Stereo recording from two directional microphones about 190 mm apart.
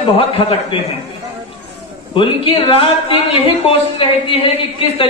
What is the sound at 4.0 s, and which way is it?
Speech, 30° left (ahead or behind).